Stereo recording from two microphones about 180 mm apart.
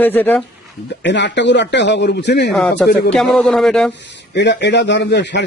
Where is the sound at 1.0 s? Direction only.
75° left (ahead or behind).